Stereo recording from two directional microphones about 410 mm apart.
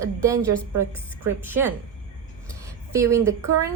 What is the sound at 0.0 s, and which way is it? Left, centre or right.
Speech, centre.